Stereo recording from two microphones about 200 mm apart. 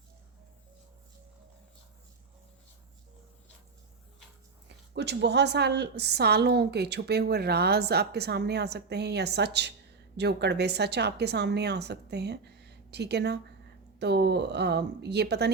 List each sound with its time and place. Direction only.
4.9 s a woman's voice: 60° right (ahead or behind)